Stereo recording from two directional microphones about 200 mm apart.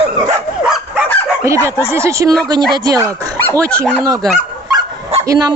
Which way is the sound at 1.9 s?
15° right (ahead or behind).